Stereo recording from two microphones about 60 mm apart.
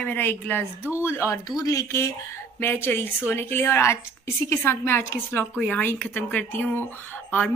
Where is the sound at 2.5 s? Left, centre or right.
Left.